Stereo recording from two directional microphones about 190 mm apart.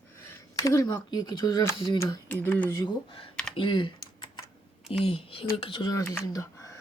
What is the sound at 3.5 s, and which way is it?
Typing, 25° left (ahead or behind).